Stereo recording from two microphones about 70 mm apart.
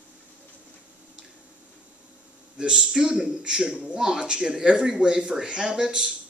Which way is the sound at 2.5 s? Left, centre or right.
Centre.